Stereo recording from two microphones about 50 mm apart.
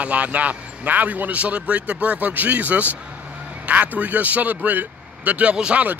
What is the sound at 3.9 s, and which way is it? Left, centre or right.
A man's voice, right.